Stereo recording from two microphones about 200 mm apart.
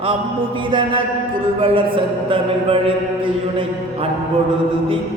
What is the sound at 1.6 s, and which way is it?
Mantra, 25° right (ahead or behind).